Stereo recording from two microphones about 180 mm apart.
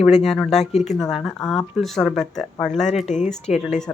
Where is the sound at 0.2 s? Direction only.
Centre (ahead or behind).